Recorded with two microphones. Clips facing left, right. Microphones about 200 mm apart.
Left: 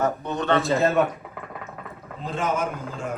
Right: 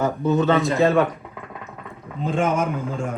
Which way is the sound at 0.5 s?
Centre (ahead or behind).